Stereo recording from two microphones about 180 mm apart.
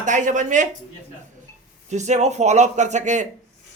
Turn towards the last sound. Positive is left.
turn(degrees=-40)  # may be behind; listen again after turning